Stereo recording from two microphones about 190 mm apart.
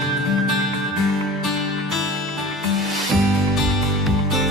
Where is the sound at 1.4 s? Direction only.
Centre (ahead or behind).